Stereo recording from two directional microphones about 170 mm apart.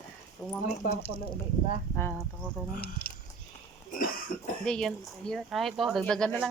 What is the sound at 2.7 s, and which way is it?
Speech, 70° left (ahead or behind).